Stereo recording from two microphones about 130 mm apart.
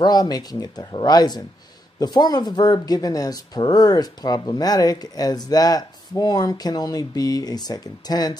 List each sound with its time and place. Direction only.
0.0 s speech: 30° left (ahead or behind)